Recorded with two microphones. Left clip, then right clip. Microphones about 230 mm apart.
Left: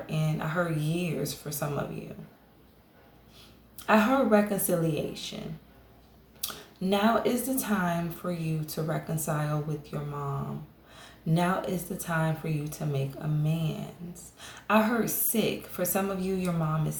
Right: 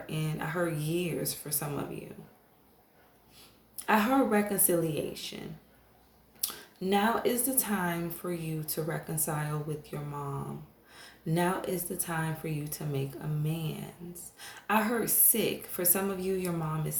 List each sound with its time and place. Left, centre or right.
0.0 s speech: right
3.8 s a woman's voice: right
6.9 s a woman's voice: right